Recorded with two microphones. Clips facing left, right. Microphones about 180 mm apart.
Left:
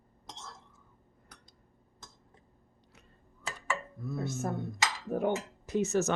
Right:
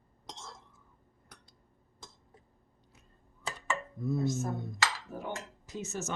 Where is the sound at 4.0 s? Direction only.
20° right (ahead or behind).